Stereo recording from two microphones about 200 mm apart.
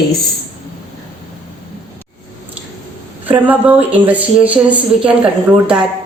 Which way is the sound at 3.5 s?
10° right (ahead or behind).